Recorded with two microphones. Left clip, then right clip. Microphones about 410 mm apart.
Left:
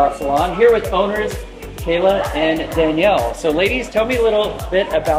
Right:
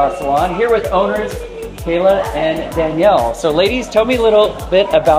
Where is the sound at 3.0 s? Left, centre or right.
Right.